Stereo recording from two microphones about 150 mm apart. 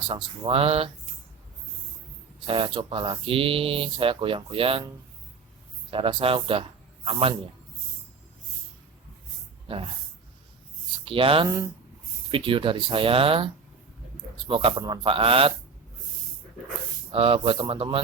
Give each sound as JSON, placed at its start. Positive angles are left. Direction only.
{"t": 0.1, "sound": "speech", "side_deg": -35}
{"t": 2.5, "sound": "speech", "side_deg": -35}
{"t": 5.9, "sound": "a man's voice", "side_deg": -35}
{"t": 11.0, "sound": "speech", "side_deg": -35}
{"t": 11.4, "sound": "speech", "side_deg": -25}
{"t": 12.3, "sound": "speech", "side_deg": -35}
{"t": 17.1, "sound": "speech", "side_deg": -35}